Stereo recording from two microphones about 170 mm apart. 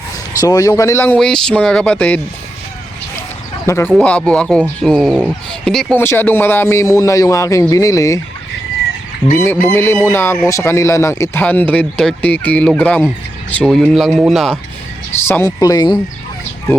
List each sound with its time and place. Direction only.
0.3 s speech: 20° left (ahead or behind)
3.7 s speech: 15° left (ahead or behind)
9.3 s speech: 15° left (ahead or behind)
15.3 s speech: 15° left (ahead or behind)